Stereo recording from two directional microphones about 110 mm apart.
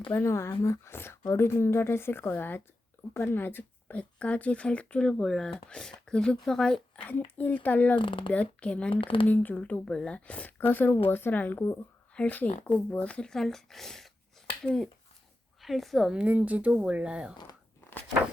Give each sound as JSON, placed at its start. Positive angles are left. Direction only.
{"t": 0.1, "sound": "speech", "side_deg": 25}
{"t": 7.9, "sound": "speech", "side_deg": 50}
{"t": 8.3, "sound": "speech", "side_deg": 10}
{"t": 9.0, "sound": "speech", "side_deg": 50}
{"t": 9.2, "sound": "speech", "side_deg": 15}